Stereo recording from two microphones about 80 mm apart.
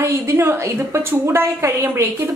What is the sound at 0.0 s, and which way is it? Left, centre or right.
A woman's voice, right.